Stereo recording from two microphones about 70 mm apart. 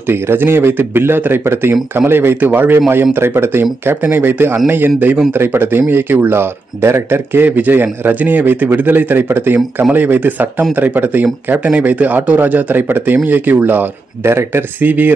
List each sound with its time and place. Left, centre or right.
0.1 s a man's voice: right
7.4 s a man's voice: right